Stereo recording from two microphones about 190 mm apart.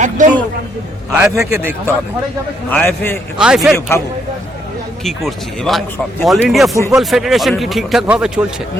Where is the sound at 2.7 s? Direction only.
10° left (ahead or behind).